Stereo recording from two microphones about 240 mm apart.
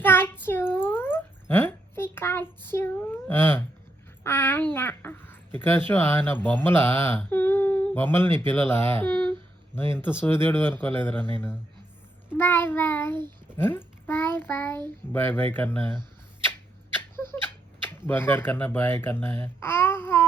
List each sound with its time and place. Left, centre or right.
0.0 s a sound: centre
4.2 s a child's voice: centre
12.4 s a child's voice: centre
17.8 s speech: centre